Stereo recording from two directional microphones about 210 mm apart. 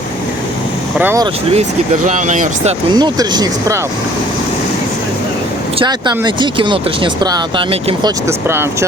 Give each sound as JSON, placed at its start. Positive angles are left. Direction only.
{"t": 0.9, "sound": "speech", "side_deg": -10}
{"t": 2.0, "sound": "speech", "side_deg": -35}
{"t": 2.9, "sound": "speech", "side_deg": -20}
{"t": 5.8, "sound": "speech", "side_deg": -20}
{"t": 8.3, "sound": "speech", "side_deg": -10}